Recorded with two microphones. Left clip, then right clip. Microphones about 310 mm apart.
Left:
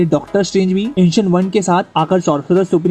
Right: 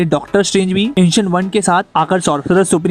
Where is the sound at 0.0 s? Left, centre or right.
Right.